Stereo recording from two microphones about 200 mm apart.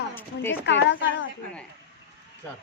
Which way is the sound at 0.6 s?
60° left (ahead or behind).